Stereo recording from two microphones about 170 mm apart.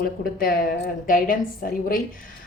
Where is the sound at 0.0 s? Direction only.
60° left (ahead or behind).